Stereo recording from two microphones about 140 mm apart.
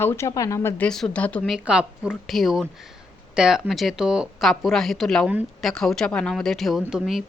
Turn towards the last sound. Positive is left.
turn(degrees=-5)  # may be behind; listen again after turning